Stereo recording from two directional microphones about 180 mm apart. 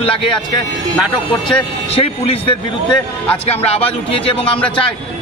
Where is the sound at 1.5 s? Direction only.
30° left (ahead or behind).